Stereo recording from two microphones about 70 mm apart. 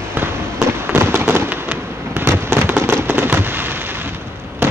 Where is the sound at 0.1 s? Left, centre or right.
Right.